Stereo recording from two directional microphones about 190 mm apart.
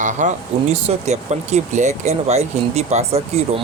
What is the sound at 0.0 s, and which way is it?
Speech, 40° right (ahead or behind).